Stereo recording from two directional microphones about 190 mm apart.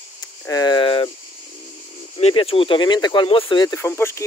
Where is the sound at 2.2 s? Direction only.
30° left (ahead or behind); by 4.2 s 15° left (ahead or behind).